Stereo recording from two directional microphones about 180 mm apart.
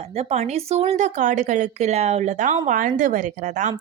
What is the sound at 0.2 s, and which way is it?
Speech, 35° right (ahead or behind).